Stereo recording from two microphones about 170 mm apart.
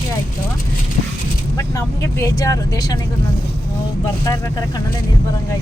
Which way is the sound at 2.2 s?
20° left (ahead or behind).